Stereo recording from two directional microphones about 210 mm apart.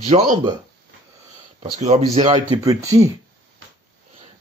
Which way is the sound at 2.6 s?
15° right (ahead or behind).